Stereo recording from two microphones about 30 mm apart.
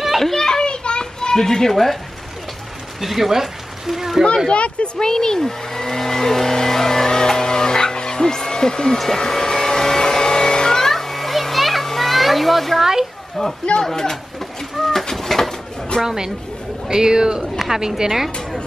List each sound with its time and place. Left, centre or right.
0.2 s children playing: centre
0.5 s children playing: left
1.3 s speech: centre
3.0 s speech: centre
4.5 s speech: left
4.9 s vehicle: centre
8.9 s vehicle: centre
11.9 s a sound: centre
13.4 s speech: centre
14.8 s bird: centre
16.0 s a woman's voice: centre